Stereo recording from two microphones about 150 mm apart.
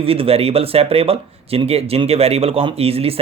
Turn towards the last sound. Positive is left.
turn(degrees=-40)  # may be behind; listen again after turning